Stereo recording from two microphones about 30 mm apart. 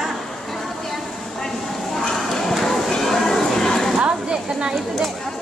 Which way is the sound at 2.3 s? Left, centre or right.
Centre.